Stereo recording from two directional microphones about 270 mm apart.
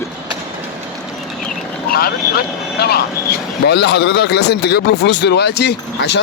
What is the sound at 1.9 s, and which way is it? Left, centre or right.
Speech, left.